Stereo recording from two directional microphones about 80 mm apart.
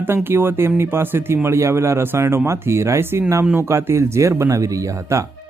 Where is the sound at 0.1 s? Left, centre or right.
Right.